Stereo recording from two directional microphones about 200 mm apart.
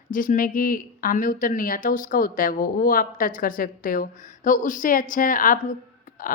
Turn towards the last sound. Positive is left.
turn(degrees=45)  # may be behind; listen again after turning